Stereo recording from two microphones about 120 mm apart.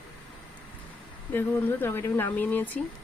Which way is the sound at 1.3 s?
20° left (ahead or behind).